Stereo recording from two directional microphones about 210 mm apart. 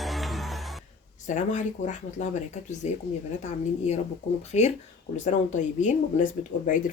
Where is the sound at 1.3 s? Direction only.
35° left (ahead or behind).